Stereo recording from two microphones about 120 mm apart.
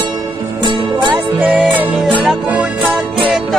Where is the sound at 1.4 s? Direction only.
5° right (ahead or behind).